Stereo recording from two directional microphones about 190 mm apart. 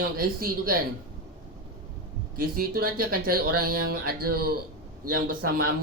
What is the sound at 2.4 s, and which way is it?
Speech, 50° right (ahead or behind).